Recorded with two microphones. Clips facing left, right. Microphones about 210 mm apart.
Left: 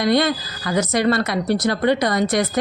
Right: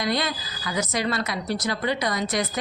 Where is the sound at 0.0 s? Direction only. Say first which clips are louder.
Left 8 dB; 65° left (ahead or behind).